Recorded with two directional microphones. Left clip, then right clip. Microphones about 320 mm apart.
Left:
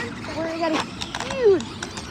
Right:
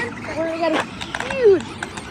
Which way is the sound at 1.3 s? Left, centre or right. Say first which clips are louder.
Right 3 dB; left.